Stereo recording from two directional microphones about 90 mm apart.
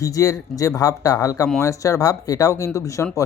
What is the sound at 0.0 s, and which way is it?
Speech, 40° left (ahead or behind).